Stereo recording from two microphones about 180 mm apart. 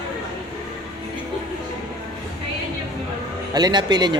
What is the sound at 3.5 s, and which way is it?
Speech, 25° right (ahead or behind).